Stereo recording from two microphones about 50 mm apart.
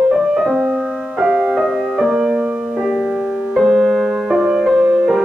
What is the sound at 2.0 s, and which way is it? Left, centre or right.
Music, centre.